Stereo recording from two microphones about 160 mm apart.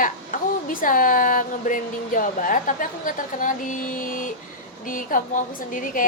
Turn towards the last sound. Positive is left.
turn(degrees=55)  # may be behind; listen again after turning